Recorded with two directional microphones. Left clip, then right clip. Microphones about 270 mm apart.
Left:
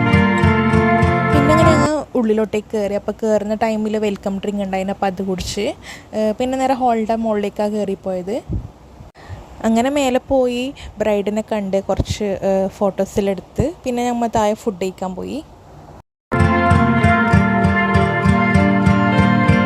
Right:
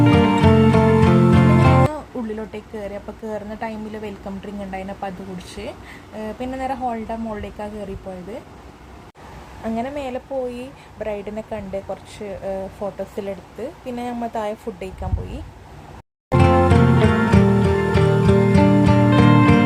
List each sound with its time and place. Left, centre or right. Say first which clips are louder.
0.0 s music: even; centre
1.9 s speech: left 11 dB; left
9.6 s speech: left 9 dB; left
16.4 s music: left 1 dB; centre